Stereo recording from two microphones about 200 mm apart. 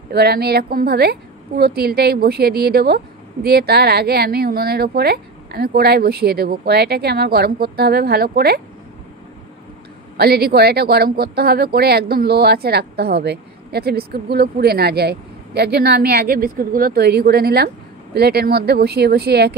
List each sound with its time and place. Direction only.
0.1 s speech: 55° right (ahead or behind)
10.1 s speech: 50° right (ahead or behind)